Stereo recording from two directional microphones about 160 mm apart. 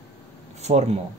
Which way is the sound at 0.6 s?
45° right (ahead or behind).